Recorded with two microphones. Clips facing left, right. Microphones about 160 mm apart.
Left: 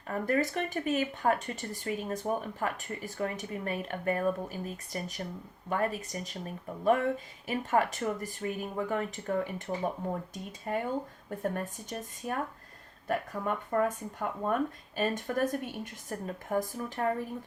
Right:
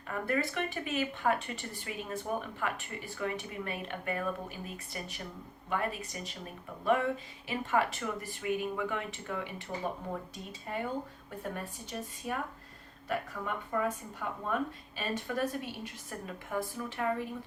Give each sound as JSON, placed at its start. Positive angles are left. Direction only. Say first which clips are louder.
{"t": 0.1, "sound": "speech", "louder": "left 3 dB", "side_deg": 40}
{"t": 10.0, "sound": "speech", "louder": "left 4 dB", "side_deg": 50}